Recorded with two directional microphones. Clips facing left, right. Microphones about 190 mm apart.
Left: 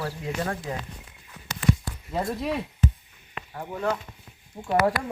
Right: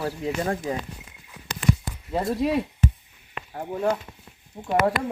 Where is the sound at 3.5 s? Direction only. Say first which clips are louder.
Right 3 dB; 30° right (ahead or behind).